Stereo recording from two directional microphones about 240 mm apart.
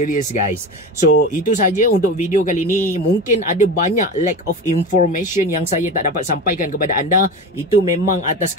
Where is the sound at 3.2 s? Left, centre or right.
Left.